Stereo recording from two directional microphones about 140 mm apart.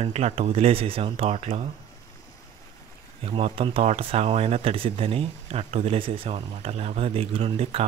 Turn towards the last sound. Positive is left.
turn(degrees=-45)  # may be behind; listen again after turning